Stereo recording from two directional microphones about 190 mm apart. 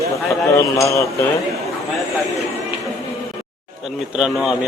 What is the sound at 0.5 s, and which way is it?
Speech, 15° left (ahead or behind).